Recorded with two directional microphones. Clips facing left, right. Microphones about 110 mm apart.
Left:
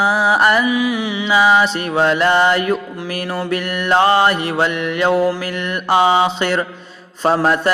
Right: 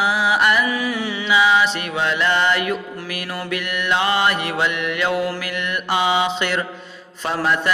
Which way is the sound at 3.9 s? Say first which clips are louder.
Left 6 dB; 35° left (ahead or behind).